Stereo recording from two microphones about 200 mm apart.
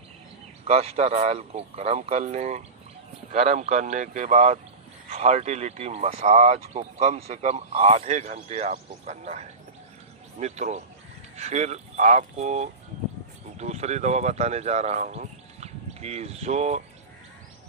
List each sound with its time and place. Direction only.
0.7 s speech: 30° right (ahead or behind)